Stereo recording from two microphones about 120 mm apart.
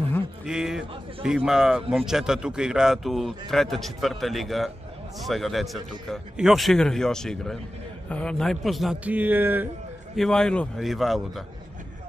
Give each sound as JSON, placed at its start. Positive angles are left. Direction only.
{"t": 0.5, "sound": "a man's voice", "side_deg": -5}
{"t": 9.0, "sound": "speech", "side_deg": -15}
{"t": 10.1, "sound": "a man's voice", "side_deg": 5}